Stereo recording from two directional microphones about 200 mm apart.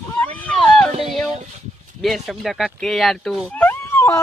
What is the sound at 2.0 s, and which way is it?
Speech, centre (ahead or behind).